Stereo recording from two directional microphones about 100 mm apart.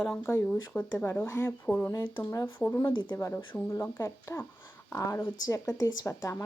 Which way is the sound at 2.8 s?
50° left (ahead or behind).